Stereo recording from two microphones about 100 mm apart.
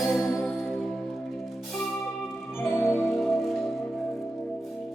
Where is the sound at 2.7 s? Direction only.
25° left (ahead or behind).